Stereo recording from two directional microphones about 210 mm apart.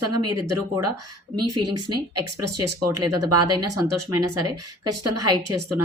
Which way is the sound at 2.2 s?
90° right.